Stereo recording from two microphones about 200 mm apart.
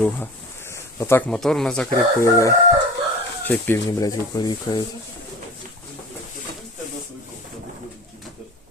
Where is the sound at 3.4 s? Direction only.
10° left (ahead or behind).